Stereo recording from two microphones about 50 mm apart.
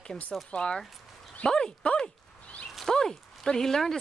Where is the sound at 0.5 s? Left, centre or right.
Centre.